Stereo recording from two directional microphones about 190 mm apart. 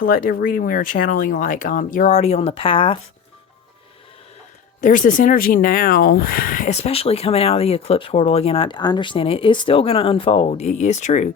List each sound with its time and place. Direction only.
0.0 s speech: 50° left (ahead or behind); by 3.0 s 30° left (ahead or behind)
4.8 s speech: 45° left (ahead or behind)